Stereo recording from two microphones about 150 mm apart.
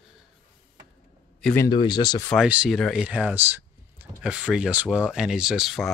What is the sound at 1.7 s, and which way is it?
Speech, 30° left (ahead or behind).